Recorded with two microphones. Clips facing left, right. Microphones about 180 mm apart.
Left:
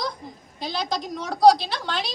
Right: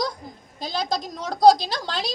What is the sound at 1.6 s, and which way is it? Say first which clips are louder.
Speech: right 1 dB; 40° right (ahead or behind).